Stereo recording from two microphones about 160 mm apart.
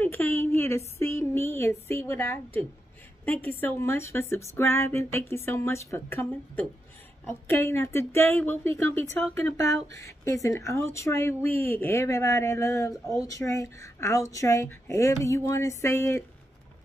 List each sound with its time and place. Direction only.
0.0 s speech: 10° left (ahead or behind)